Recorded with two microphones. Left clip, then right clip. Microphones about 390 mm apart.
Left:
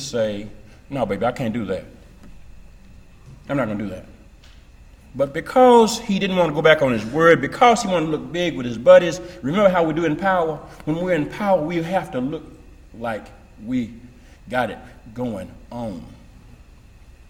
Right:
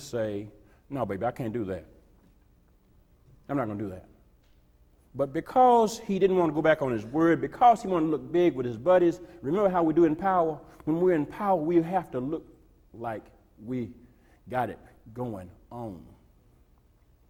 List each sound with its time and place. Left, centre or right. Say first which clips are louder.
0.0 s a man's voice: left 9 dB; right
3.4 s a man's voice: left 7 dB; right
5.1 s a man's voice: left 7 dB; right
14.4 s a man's voice: left 7 dB; right